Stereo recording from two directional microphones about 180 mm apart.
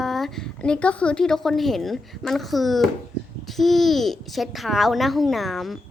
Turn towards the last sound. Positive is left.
turn(degrees=0)  # may be behind; listen again after turning